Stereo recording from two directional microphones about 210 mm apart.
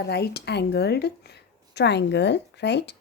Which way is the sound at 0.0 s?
50° left (ahead or behind).